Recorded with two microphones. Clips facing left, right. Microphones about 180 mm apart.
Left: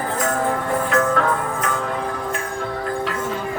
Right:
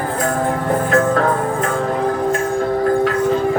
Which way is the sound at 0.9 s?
40° right (ahead or behind).